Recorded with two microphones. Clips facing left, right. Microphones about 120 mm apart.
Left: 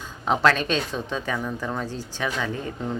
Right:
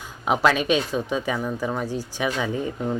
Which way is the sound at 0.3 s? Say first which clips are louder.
Right 1 dB; 10° right (ahead or behind).